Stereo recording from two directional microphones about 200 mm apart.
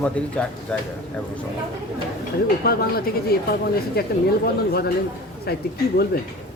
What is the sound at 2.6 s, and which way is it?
Speech, 50° left (ahead or behind).